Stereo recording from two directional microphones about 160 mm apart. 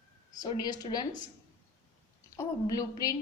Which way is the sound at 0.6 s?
25° left (ahead or behind).